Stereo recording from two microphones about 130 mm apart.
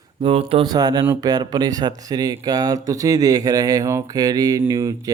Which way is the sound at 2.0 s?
30° right (ahead or behind).